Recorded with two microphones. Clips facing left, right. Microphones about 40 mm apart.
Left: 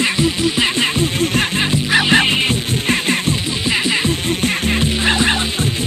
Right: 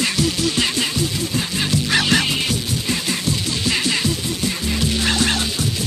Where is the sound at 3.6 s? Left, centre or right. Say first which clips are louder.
Left 3 dB; left.